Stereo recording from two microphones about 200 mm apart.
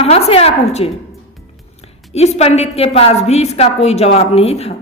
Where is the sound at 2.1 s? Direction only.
30° left (ahead or behind).